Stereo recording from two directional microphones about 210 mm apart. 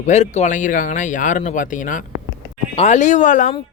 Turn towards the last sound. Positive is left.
turn(degrees=35)  # may be behind; listen again after turning